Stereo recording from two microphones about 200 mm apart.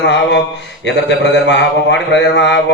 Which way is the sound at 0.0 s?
60° left (ahead or behind).